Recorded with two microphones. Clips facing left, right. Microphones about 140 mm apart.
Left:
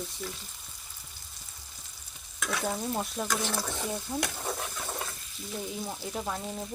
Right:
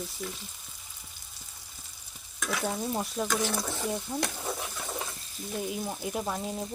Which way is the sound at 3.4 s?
15° right (ahead or behind).